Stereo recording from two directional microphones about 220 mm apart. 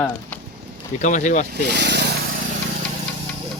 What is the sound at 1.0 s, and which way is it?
Speech, 35° left (ahead or behind).